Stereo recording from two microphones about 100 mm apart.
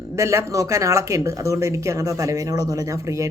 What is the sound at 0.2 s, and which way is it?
Speech, 30° right (ahead or behind).